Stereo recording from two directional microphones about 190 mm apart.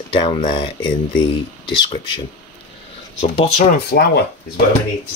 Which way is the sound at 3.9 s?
55° left (ahead or behind).